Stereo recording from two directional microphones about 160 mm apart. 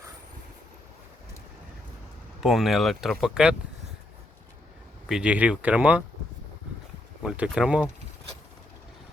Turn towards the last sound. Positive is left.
turn(degrees=-5)  # may be behind; listen again after turning